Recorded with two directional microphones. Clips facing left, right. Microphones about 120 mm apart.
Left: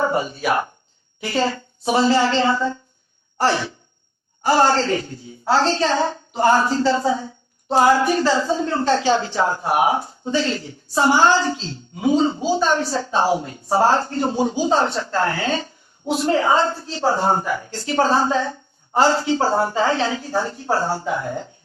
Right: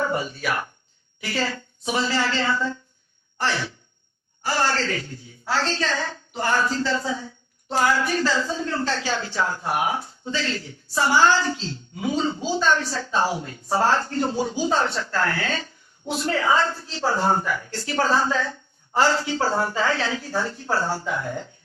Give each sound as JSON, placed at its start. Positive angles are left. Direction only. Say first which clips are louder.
{"t": 0.0, "sound": "a woman's voice", "louder": "left 4 dB", "side_deg": 30}
{"t": 4.4, "sound": "a woman's voice", "louder": "left 7 dB", "side_deg": 25}
{"t": 12.4, "sound": "a woman's voice", "louder": "left 5 dB", "side_deg": 15}
{"t": 12.6, "sound": "a woman's voice", "louder": "left 3 dB", "side_deg": 25}